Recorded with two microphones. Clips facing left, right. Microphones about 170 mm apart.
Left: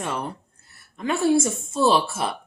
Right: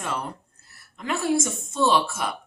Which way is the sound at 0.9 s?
25° left (ahead or behind).